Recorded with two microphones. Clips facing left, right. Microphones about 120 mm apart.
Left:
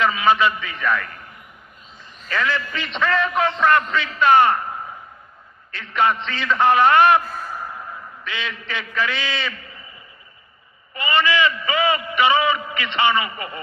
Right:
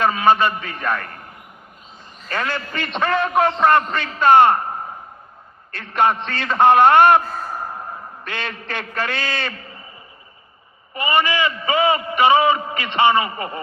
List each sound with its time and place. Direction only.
0.0 s a man's voice: 45° right (ahead or behind)
2.3 s a man's voice: 45° right (ahead or behind); by 4.5 s 25° right (ahead or behind)
4.5 s a sound: 35° right (ahead or behind)
5.7 s a man's voice: 50° right (ahead or behind)
7.1 s a sound: 35° right (ahead or behind)
8.2 s a man's voice: 50° right (ahead or behind)
10.9 s a man's voice: 20° right (ahead or behind)